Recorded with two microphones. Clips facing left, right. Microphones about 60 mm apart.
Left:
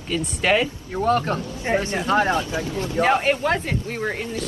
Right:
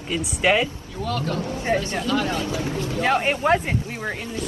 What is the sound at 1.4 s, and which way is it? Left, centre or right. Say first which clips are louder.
Speech: right 4 dB; right.